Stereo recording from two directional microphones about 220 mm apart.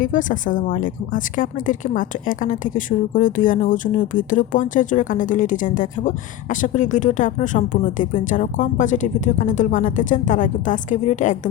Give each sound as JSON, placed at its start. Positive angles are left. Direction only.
{"t": 0.0, "sound": "speech", "side_deg": 35}